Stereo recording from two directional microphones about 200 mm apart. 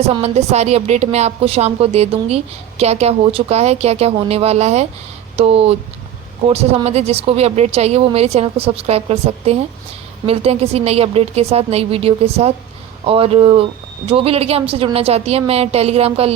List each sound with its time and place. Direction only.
0.0 s a woman's voice: 30° right (ahead or behind)